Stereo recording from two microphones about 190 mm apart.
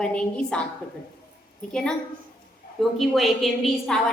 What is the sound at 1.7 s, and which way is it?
Speech, 5° left (ahead or behind).